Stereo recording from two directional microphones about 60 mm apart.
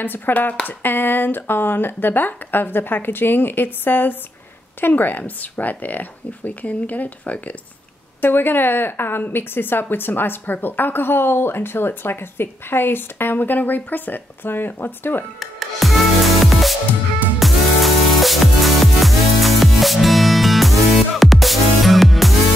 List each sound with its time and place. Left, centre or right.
0.0 s a woman's voice: left
8.2 s a woman's voice: left
15.3 s music: centre